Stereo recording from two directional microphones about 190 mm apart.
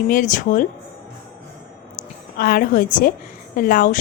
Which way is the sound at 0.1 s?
45° left (ahead or behind).